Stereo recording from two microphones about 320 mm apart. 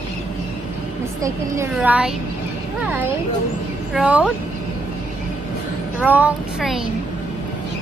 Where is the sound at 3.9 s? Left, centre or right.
Centre.